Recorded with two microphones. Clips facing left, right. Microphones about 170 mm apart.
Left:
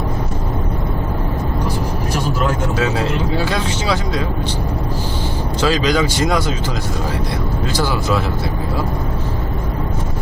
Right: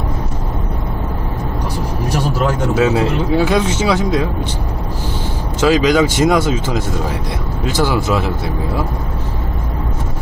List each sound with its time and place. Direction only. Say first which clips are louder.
3.3 s speech: right 5 dB; 20° right (ahead or behind)
5.5 s speech: right 5 dB; 20° right (ahead or behind)
7.7 s speech: right 4 dB; 20° right (ahead or behind)